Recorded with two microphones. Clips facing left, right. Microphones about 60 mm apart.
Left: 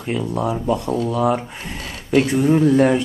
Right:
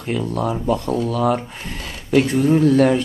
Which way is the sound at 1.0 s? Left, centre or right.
Left.